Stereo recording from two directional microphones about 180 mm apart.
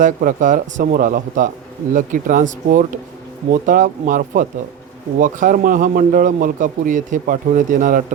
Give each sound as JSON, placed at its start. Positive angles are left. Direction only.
{"t": 0.0, "sound": "a man's voice", "side_deg": -45}